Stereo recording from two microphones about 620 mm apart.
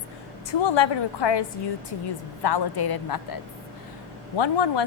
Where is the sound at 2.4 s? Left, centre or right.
Left.